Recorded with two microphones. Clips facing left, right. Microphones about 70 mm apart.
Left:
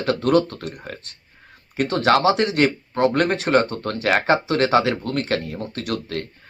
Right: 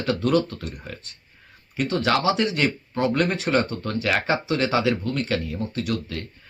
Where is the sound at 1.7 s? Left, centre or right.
Left.